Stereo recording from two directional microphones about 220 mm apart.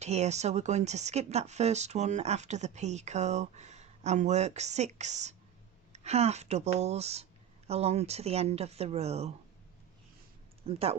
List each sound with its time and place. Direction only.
0.0 s speech: 30° right (ahead or behind)
10.7 s speech: 25° right (ahead or behind)